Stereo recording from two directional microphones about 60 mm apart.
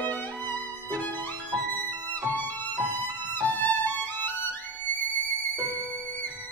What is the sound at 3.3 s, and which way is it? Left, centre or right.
Violin, left.